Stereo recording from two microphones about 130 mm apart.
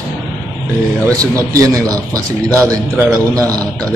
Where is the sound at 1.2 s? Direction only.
25° right (ahead or behind).